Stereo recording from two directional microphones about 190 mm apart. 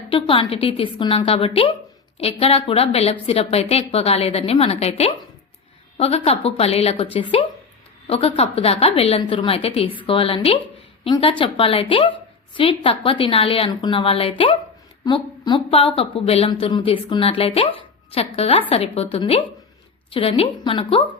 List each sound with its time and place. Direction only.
0.1 s a woman's voice: 30° left (ahead or behind)